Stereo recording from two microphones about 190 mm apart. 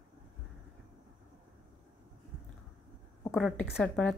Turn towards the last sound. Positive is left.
turn(degrees=5)  # may be behind; listen again after turning